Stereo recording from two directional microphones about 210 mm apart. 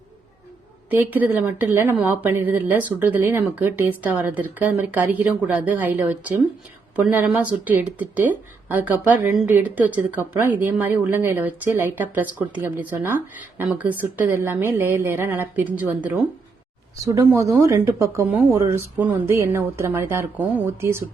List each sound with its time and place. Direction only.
0.9 s speech: 10° right (ahead or behind)
17.0 s speech: 15° right (ahead or behind)